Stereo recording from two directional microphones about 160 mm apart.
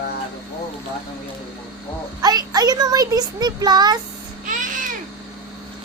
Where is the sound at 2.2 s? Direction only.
25° right (ahead or behind).